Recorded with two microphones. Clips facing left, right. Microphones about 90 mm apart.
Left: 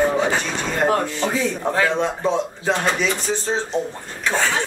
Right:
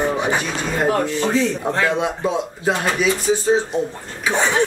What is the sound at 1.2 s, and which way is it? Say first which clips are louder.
Speech: right 3 dB; 10° left (ahead or behind).